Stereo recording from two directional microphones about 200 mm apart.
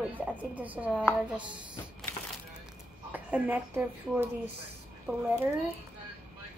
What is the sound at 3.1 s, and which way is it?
A woman's voice, 10° right (ahead or behind).